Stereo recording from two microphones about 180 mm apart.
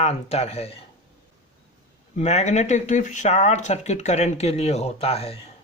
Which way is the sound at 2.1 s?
40° left (ahead or behind).